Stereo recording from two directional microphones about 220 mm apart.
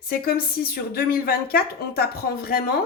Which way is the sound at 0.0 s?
45° left (ahead or behind).